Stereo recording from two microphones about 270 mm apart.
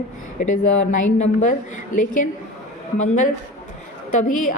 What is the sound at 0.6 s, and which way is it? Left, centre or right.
Speech, left.